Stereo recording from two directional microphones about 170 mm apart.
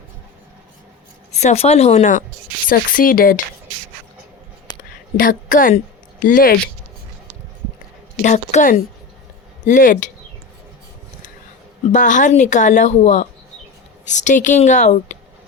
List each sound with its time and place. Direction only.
1.4 s speech: 40° left (ahead or behind)
2.6 s speech: 55° left (ahead or behind)
4.7 s a sound: 25° left (ahead or behind)
5.1 s speech: 55° left (ahead or behind)
8.2 s speech: 45° left (ahead or behind)
11.9 s speech: 50° left (ahead or behind)